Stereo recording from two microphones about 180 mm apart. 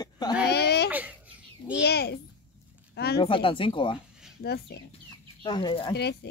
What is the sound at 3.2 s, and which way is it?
Speech, 30° left (ahead or behind).